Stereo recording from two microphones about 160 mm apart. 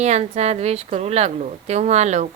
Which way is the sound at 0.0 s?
45° right (ahead or behind).